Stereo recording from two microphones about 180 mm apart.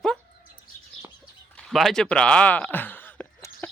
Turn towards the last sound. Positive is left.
turn(degrees=10)  # may be behind; listen again after turning